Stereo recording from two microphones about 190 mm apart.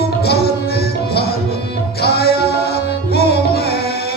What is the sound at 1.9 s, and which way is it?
Music, 55° left (ahead or behind).